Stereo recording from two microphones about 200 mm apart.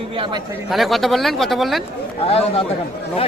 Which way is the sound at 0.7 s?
Centre (ahead or behind).